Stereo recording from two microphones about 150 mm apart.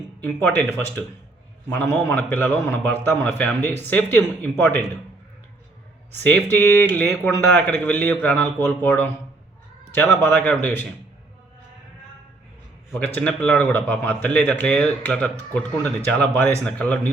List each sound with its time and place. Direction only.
0.3 s a man's voice: 10° left (ahead or behind)
6.1 s a man's voice: 10° left (ahead or behind)
13.0 s a man's voice: 10° left (ahead or behind)